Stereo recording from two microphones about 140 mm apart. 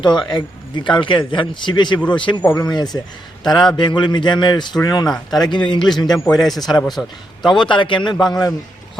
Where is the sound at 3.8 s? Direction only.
35° left (ahead or behind).